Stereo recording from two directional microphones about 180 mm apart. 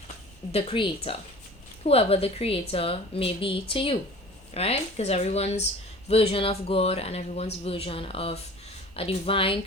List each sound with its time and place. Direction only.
0.5 s a woman's voice: 30° left (ahead or behind)